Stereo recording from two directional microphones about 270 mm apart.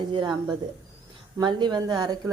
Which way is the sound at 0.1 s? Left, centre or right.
Centre.